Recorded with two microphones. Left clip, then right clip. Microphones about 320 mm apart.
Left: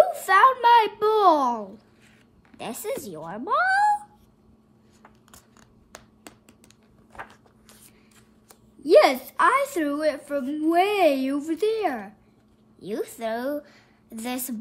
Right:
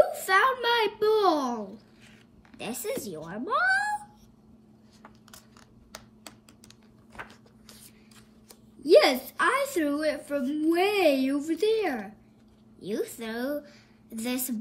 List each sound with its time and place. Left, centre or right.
0.0 s a sound: centre
2.5 s a woman's voice: centre
7.1 s walk: centre
8.8 s a woman's voice: centre